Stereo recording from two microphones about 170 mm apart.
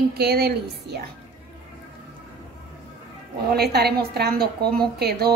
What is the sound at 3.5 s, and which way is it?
A woman's voice, 70° right (ahead or behind).